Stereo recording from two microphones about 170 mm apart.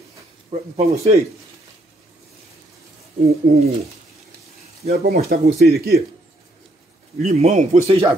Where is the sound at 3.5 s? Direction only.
60° right (ahead or behind).